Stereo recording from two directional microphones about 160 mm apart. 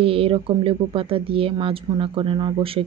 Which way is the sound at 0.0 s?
35° right (ahead or behind).